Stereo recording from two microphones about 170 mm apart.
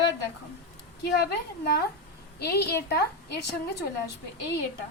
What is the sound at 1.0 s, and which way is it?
A woman's voice, 70° left (ahead or behind).